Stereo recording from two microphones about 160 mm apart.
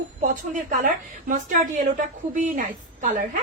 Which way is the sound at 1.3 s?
50° right (ahead or behind).